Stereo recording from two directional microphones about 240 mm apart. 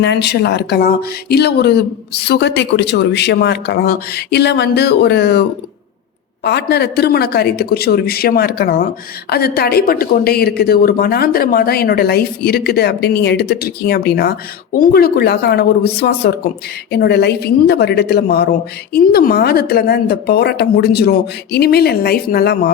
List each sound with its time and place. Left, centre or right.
0.0 s speech: left
6.4 s speech: left